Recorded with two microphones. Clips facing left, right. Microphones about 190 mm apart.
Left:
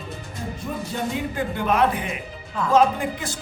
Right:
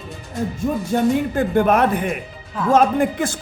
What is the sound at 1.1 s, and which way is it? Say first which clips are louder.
Speech: right 8 dB; 50° right (ahead or behind).